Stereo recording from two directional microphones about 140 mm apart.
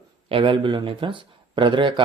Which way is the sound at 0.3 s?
40° right (ahead or behind).